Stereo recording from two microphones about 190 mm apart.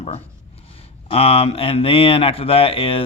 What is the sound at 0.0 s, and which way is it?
Speech, 35° left (ahead or behind).